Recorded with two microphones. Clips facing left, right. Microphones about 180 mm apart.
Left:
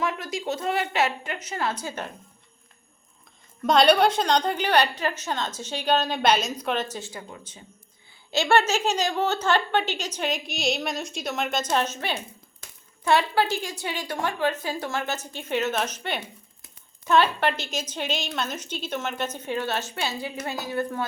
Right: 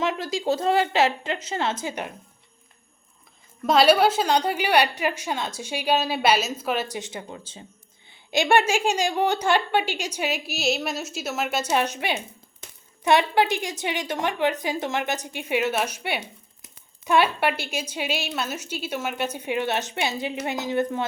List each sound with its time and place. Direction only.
0.0 s a sound: 25° right (ahead or behind)
0.3 s a woman's voice: 30° right (ahead or behind); by 2.1 s 15° right (ahead or behind)
3.6 s a woman's voice: 5° right (ahead or behind); by 7.6 s 30° right (ahead or behind)
8.1 s a woman's voice: 15° right (ahead or behind)